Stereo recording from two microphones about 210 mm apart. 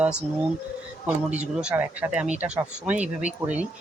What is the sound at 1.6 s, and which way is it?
Speech, 5° right (ahead or behind).